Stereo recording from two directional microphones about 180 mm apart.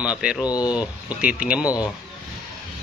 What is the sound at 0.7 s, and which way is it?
Speech, 5° right (ahead or behind).